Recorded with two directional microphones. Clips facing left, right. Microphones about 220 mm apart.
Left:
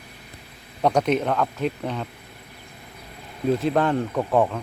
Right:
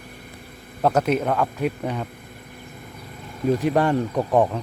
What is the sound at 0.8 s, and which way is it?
Speech, 5° right (ahead or behind).